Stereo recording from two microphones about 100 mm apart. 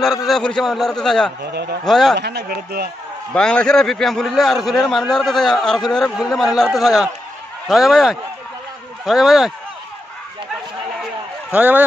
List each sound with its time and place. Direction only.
0.0 s a man's voice: 5° right (ahead or behind)
3.3 s a man's voice: 10° left (ahead or behind)
11.5 s speech: 15° right (ahead or behind)